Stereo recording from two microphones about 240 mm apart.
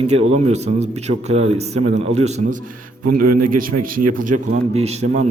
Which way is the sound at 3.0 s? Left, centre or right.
Right.